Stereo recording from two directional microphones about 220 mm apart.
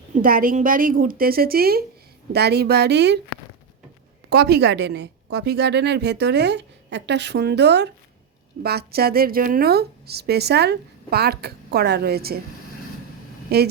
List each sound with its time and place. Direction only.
0.1 s a woman's voice: 40° right (ahead or behind)
4.3 s a woman's voice: 45° right (ahead or behind)
13.5 s a woman's voice: 45° right (ahead or behind)